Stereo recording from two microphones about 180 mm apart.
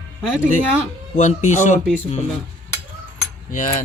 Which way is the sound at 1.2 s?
40° left (ahead or behind).